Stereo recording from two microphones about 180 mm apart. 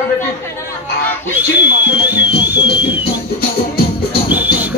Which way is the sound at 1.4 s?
10° right (ahead or behind).